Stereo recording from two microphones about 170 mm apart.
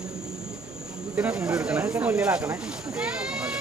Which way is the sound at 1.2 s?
5° right (ahead or behind).